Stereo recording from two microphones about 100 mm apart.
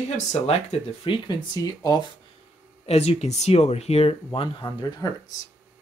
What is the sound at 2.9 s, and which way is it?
Speech, 90° left.